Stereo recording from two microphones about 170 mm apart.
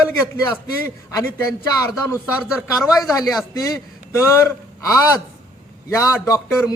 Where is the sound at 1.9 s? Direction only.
15° left (ahead or behind).